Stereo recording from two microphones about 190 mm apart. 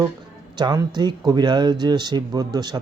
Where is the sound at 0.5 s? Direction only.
25° right (ahead or behind).